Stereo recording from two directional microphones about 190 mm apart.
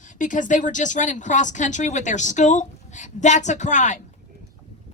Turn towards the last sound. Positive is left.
turn(degrees=40)  # may be behind; listen again after turning